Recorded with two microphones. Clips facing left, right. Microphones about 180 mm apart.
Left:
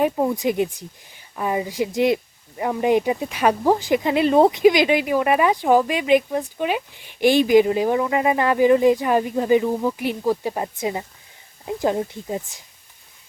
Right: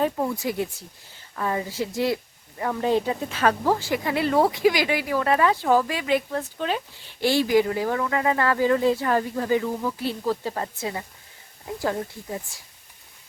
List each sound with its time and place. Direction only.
0.0 s speech: 20° left (ahead or behind)